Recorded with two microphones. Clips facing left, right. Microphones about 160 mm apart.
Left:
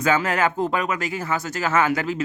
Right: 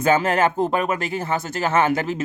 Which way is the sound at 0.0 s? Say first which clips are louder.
Right 3 dB; 25° right (ahead or behind).